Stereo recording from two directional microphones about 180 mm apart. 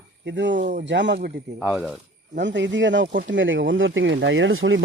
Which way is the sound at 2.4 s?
85° right.